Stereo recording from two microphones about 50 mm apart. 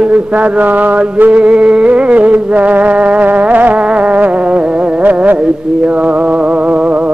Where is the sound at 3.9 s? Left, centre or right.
Right.